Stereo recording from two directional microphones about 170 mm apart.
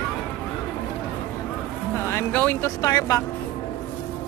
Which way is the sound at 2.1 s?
10° left (ahead or behind).